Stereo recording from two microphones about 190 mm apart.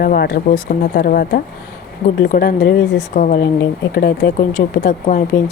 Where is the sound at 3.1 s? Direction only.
45° left (ahead or behind).